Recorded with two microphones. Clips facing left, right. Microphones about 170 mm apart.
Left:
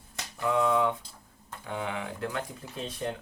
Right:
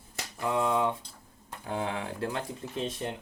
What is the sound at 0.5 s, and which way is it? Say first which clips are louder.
Speech: left 2 dB; 25° right (ahead or behind).